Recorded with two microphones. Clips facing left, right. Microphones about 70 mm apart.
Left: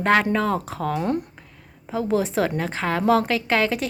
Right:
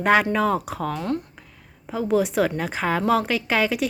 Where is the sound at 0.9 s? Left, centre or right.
Left.